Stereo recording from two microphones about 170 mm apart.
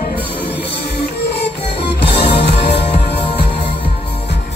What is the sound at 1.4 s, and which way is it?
Music, 75° left (ahead or behind).